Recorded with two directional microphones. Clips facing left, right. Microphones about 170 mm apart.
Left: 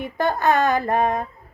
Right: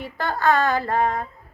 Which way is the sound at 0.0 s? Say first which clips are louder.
Left 2 dB; 20° left (ahead or behind).